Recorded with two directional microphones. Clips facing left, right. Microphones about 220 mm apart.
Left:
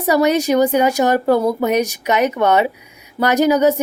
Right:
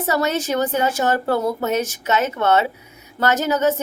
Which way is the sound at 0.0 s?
15° left (ahead or behind).